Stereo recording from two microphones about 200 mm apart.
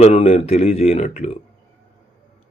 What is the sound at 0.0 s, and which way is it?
Speech, 30° left (ahead or behind).